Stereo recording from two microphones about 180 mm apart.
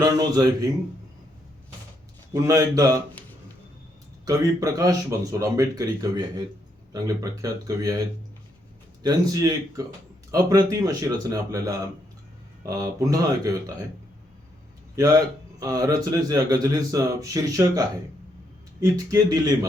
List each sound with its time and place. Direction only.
0.0 s speech: 20° right (ahead or behind)
2.3 s speech: 20° right (ahead or behind)
4.3 s speech: 20° right (ahead or behind)
9.0 s speech: 20° right (ahead or behind)
14.9 s a man's voice: 20° right (ahead or behind)